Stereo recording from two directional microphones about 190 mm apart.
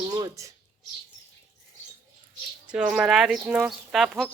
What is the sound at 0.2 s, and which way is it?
Speech, 15° right (ahead or behind).